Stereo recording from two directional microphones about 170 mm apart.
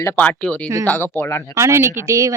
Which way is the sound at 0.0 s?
10° left (ahead or behind).